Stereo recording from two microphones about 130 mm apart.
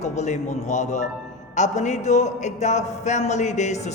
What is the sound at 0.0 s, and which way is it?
A man's voice, 65° left (ahead or behind).